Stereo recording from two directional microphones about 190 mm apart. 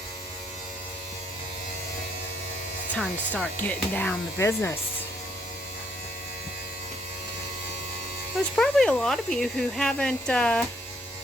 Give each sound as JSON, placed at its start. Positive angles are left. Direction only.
{"t": 2.9, "sound": "speech", "side_deg": 5}
{"t": 8.5, "sound": "speech", "side_deg": 5}